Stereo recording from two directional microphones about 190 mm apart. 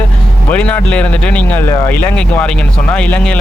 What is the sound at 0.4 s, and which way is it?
Speech, 5° left (ahead or behind).